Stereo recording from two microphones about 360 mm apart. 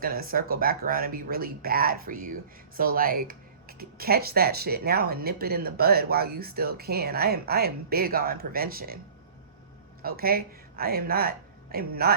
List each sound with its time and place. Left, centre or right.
0.0 s speech: right
10.0 s speech: right